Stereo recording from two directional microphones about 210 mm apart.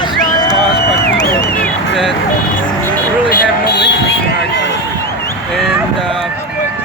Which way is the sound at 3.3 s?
55° left (ahead or behind).